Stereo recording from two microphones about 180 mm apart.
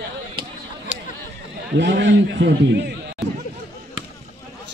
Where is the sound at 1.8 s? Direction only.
80° right.